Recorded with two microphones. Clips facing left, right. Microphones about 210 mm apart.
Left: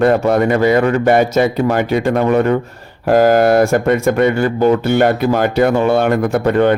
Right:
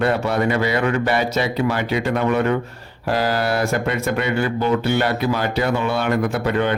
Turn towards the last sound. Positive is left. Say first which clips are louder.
# left 7 dB
turn(degrees=50)  # may be behind; listen again after turning